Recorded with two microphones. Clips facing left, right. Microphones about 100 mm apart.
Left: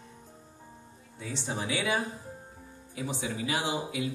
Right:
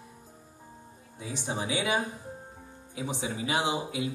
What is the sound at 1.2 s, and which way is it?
Speech, 15° right (ahead or behind).